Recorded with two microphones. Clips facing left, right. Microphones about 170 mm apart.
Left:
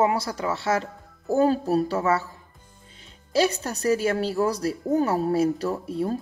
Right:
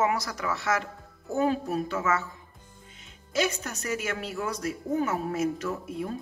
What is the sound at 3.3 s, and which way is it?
Speech, 35° left (ahead or behind).